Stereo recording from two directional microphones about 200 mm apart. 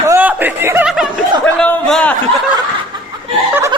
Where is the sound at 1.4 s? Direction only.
10° left (ahead or behind).